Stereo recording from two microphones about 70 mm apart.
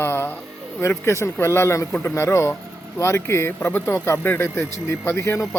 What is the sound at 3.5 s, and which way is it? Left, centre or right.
Speech, left.